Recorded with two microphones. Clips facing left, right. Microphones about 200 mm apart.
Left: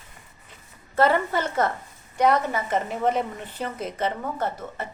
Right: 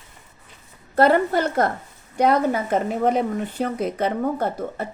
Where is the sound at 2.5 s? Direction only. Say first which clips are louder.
Right 4 dB; 55° right (ahead or behind).